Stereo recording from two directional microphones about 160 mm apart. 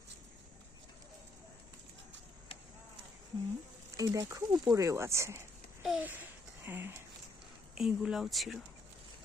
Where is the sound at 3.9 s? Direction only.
20° right (ahead or behind).